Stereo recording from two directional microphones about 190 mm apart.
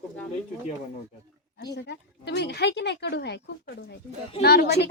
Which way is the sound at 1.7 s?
65° left (ahead or behind).